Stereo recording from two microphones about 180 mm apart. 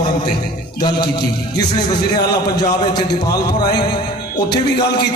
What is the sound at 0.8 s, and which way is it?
Speech, 25° left (ahead or behind).